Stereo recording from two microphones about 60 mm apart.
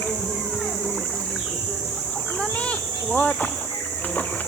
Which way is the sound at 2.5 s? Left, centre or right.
Left.